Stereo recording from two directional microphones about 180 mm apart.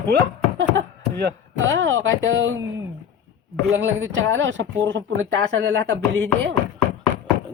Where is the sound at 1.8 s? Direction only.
90° right.